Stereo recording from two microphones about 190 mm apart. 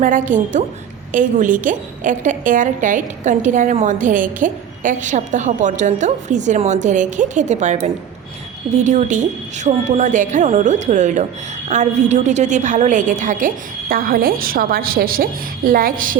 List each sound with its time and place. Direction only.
0.0 s a woman's voice: 45° right (ahead or behind)